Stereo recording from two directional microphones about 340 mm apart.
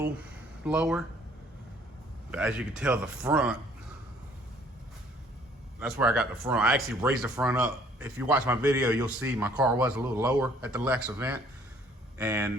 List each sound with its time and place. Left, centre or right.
0.6 s speech: centre
2.3 s speech: centre
5.8 s speech: centre